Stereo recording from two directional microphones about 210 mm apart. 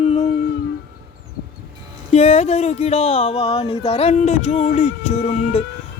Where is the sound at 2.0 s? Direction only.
30° left (ahead or behind).